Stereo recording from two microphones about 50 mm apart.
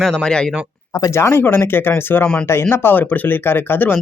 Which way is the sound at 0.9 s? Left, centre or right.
Left.